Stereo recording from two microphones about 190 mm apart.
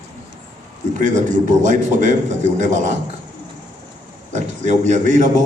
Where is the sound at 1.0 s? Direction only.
40° right (ahead or behind).